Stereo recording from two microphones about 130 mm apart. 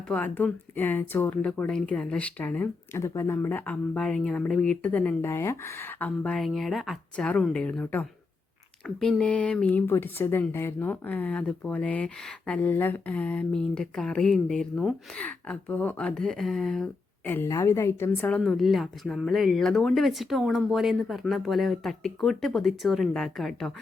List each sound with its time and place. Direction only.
0.1 s speech: 10° left (ahead or behind)
17.2 s speech: 15° left (ahead or behind)